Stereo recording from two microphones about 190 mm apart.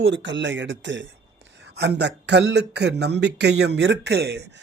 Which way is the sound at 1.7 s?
65° right (ahead or behind).